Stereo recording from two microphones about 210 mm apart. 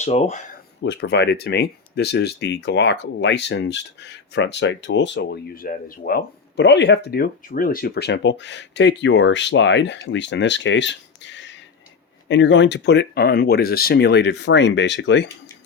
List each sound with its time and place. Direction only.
0.0 s speech: 30° left (ahead or behind)
0.8 s speech: 55° left (ahead or behind)